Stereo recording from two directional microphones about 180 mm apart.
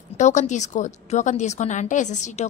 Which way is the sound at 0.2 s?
40° left (ahead or behind).